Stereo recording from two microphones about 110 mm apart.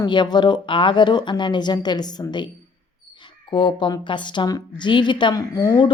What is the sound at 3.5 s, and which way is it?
Speech, 50° left (ahead or behind).